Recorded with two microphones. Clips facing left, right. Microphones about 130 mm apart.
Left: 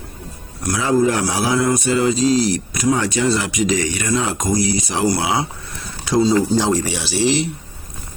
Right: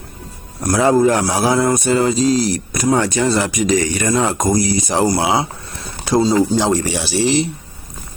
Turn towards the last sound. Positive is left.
turn(degrees=-35)  # may be behind; listen again after turning